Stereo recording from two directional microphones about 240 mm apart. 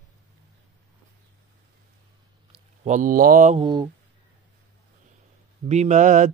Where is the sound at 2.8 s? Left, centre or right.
Right.